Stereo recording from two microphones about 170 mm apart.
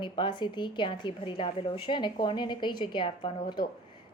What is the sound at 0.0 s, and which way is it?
A woman's voice, 30° left (ahead or behind).